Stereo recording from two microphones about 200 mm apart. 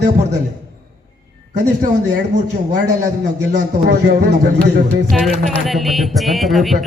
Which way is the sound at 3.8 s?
55° right (ahead or behind).